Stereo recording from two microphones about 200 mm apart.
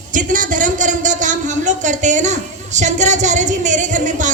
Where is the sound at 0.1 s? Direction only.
40° right (ahead or behind).